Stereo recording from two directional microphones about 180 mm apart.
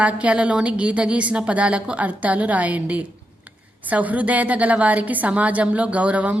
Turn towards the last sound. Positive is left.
turn(degrees=-10)  # may be behind; listen again after turning